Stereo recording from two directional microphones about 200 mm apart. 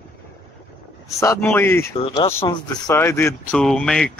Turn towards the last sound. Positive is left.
turn(degrees=5)  # may be behind; listen again after turning